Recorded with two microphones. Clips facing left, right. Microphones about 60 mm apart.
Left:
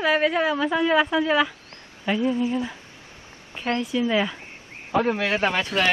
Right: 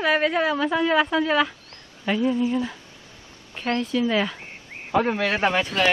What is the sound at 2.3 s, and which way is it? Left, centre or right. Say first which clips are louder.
Speech: right 1 dB; left.